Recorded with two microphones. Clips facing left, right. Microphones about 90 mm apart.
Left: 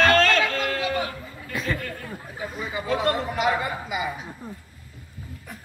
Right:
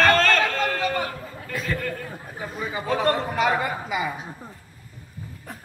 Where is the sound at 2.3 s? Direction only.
40° right (ahead or behind).